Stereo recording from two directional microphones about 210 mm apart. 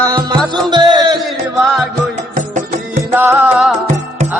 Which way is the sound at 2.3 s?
35° right (ahead or behind).